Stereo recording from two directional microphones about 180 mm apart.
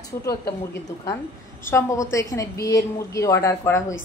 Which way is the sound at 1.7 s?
15° left (ahead or behind).